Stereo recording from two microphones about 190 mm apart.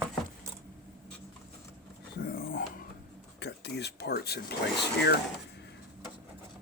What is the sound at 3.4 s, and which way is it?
Speech, 60° left (ahead or behind).